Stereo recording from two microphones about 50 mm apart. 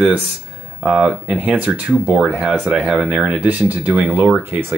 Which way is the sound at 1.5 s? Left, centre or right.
Right.